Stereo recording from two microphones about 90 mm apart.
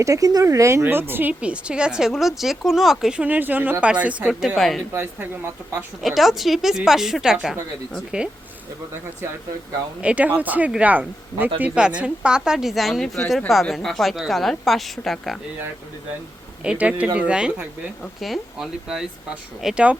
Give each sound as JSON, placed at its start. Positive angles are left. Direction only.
{"t": 0.0, "sound": "speech", "side_deg": -40}
{"t": 4.9, "sound": "speech", "side_deg": -25}
{"t": 6.0, "sound": "a woman's voice", "side_deg": 0}
{"t": 10.0, "sound": "a woman's voice", "side_deg": -15}
{"t": 16.6, "sound": "a woman's voice", "side_deg": -15}